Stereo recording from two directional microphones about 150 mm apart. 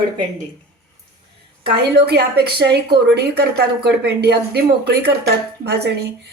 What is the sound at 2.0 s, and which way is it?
A woman's voice, 90° right.